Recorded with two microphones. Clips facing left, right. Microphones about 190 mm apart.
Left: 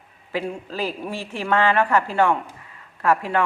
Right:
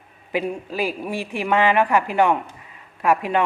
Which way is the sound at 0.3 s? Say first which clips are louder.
Right 3 dB; 15° right (ahead or behind).